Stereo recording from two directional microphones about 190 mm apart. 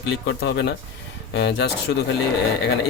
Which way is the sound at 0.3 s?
65° left (ahead or behind).